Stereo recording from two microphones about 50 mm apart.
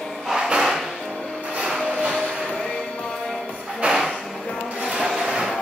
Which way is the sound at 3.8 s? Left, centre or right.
Right.